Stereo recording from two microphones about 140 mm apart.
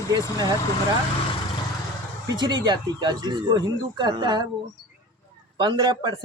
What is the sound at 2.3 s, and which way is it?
Speech, 30° right (ahead or behind).